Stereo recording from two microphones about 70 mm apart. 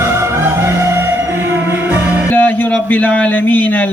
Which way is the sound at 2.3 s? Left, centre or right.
Left.